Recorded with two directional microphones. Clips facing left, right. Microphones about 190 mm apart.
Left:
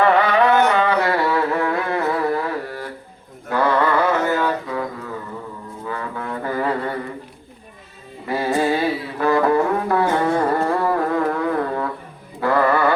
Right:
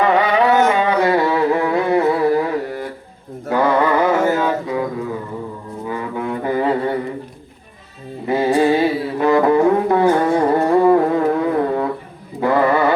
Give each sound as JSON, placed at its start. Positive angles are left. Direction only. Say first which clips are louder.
{"t": 0.0, "sound": "music", "louder": "right 1 dB", "side_deg": -20}
{"t": 3.5, "sound": "mantra", "louder": "right 3 dB", "side_deg": -20}
{"t": 5.8, "sound": "brass instrument", "louder": "right 5 dB", "side_deg": -15}
{"t": 8.3, "sound": "music", "louder": "right 5 dB", "side_deg": -20}